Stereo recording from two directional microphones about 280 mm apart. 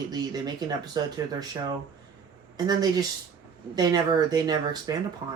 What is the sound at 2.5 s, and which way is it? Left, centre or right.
Speech, centre.